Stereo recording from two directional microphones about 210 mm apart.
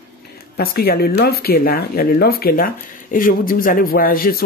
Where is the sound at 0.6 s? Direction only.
45° left (ahead or behind).